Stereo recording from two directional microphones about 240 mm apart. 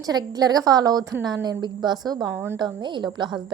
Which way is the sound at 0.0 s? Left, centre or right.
Centre.